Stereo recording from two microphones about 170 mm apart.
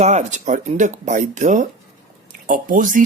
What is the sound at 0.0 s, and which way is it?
Speech, 45° right (ahead or behind).